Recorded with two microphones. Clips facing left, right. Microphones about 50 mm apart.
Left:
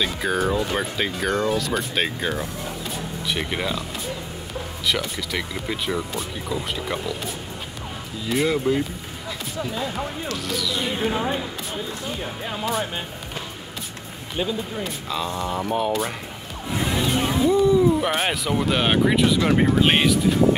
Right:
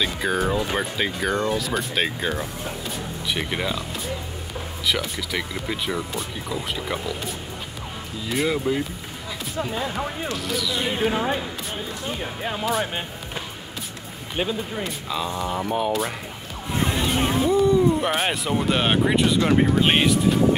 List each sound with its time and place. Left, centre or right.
0.0 s speech: centre
4.8 s speech: centre
9.6 s speech: centre
10.3 s speech: centre
14.8 s speech: centre
16.7 s music: right
17.5 s speech: centre